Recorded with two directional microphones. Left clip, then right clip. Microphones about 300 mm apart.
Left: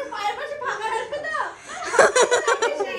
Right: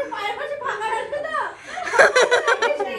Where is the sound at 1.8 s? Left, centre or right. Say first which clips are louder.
Right 2 dB; centre.